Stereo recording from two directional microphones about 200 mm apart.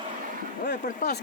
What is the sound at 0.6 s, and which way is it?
Speech, 45° left (ahead or behind).